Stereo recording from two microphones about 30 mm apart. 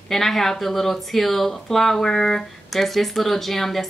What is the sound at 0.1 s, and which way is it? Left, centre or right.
Speech, centre.